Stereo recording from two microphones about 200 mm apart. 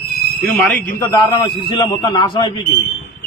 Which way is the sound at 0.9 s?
15° left (ahead or behind).